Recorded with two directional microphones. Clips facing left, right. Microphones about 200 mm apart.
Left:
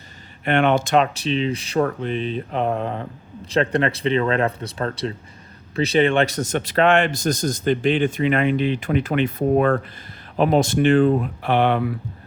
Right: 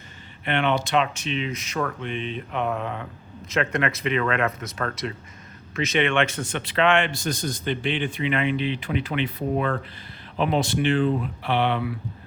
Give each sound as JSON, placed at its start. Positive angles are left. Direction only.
{"t": 0.4, "sound": "speech", "side_deg": 45}